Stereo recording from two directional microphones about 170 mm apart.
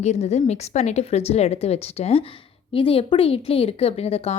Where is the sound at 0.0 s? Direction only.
40° left (ahead or behind).